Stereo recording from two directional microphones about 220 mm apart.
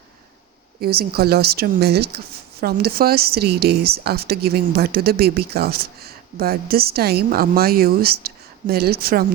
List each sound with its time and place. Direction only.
0.8 s a woman's voice: 45° right (ahead or behind)